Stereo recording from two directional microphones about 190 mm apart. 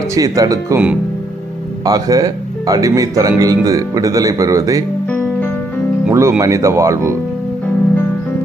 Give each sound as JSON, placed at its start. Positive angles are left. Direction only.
{"t": 0.1, "sound": "speech", "side_deg": -20}
{"t": 1.8, "sound": "speech", "side_deg": -20}
{"t": 5.0, "sound": "music", "side_deg": 10}
{"t": 6.1, "sound": "speech", "side_deg": -10}